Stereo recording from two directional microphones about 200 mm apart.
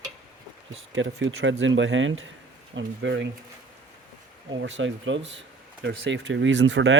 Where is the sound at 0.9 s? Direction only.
70° right (ahead or behind).